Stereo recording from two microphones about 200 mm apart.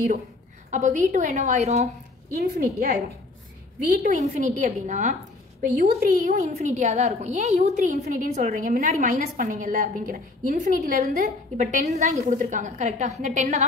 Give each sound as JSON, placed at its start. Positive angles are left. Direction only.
{"t": 0.7, "sound": "a woman's voice", "side_deg": -40}
{"t": 2.3, "sound": "a woman's voice", "side_deg": -50}
{"t": 3.8, "sound": "a woman's voice", "side_deg": -40}